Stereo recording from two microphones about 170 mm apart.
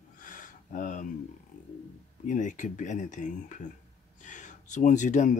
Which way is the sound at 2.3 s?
45° left (ahead or behind).